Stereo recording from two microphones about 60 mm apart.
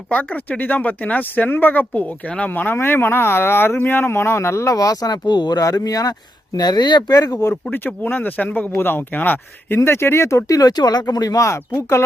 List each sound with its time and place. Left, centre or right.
0.1 s speech: left
2.5 s speech: left
7.7 s speech: left
10.5 s speech: left